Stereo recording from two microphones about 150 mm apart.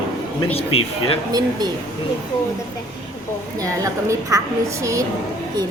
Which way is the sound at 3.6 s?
20° right (ahead or behind).